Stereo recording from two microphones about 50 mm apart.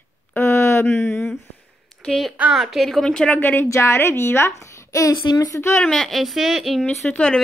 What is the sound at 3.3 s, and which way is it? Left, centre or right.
Speech, left.